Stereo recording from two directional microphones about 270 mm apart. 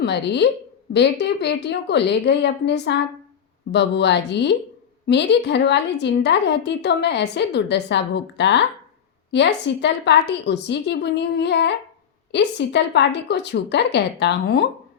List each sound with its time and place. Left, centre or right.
0.0 s a woman's voice: left